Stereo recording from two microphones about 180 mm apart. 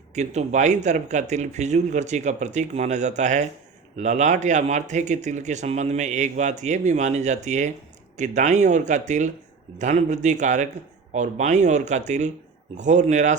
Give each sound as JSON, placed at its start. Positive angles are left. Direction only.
{"t": 0.1, "sound": "speech", "side_deg": -40}